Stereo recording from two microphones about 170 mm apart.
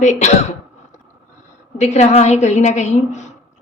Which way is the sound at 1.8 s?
40° left (ahead or behind).